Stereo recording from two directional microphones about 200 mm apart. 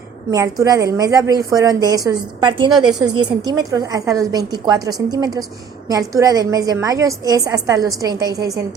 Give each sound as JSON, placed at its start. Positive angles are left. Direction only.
{"t": 0.3, "sound": "a woman's voice", "side_deg": -15}